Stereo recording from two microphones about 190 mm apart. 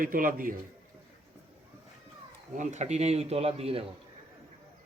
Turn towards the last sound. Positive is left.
turn(degrees=-30)  # may be behind; listen again after turning